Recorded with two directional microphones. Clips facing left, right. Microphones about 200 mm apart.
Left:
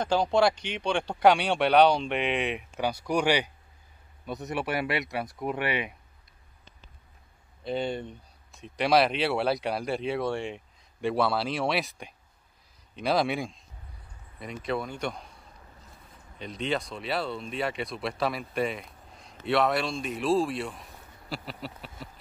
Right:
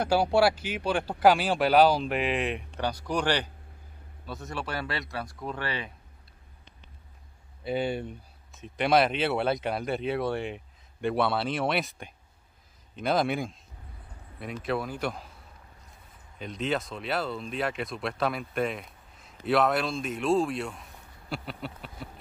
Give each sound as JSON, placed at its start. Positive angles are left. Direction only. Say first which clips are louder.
{"t": 0.0, "sound": "speech", "louder": "right 1 dB", "side_deg": -10}
{"t": 7.6, "sound": "speech", "louder": "right 1 dB", "side_deg": -5}
{"t": 16.3, "sound": "speech", "louder": "right 1 dB", "side_deg": 0}